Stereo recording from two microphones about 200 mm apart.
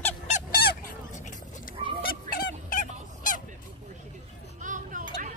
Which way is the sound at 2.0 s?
45° left (ahead or behind).